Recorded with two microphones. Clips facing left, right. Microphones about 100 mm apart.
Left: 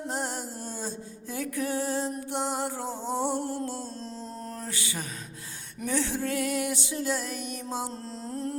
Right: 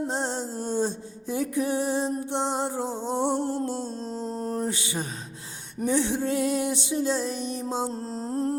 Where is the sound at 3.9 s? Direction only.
40° right (ahead or behind); by 5.7 s 25° right (ahead or behind).